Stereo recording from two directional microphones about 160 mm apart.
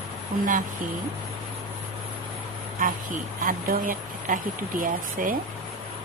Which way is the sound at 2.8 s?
60° right (ahead or behind).